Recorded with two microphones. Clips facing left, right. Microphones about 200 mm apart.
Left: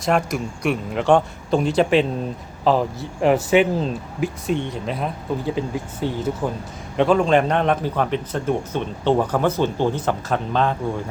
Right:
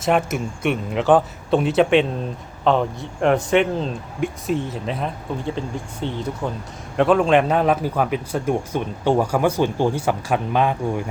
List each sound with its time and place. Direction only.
0.0 s a man's voice: centre (ahead or behind)